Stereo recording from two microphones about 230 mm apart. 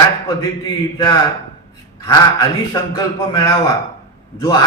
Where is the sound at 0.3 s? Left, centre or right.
Centre.